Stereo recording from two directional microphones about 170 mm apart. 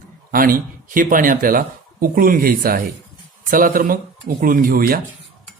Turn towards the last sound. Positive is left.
turn(degrees=-55)  # may be behind; listen again after turning